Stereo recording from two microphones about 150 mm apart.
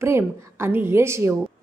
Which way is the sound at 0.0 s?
15° right (ahead or behind).